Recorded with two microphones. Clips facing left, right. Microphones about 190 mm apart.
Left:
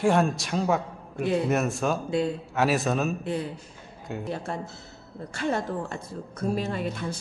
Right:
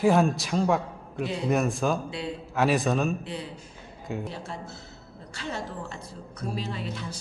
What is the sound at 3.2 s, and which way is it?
Speech, 50° left (ahead or behind).